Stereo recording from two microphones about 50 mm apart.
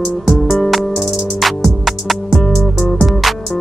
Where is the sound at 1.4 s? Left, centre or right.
Centre.